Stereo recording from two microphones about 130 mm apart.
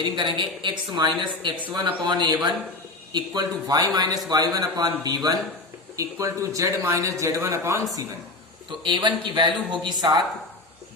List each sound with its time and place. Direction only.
0.0 s a woman's voice: 40° right (ahead or behind); by 7.9 s 20° right (ahead or behind)
8.8 s a woman's voice: 40° right (ahead or behind)